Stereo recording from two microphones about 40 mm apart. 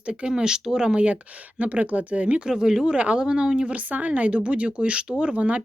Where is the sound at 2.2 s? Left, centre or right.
Right.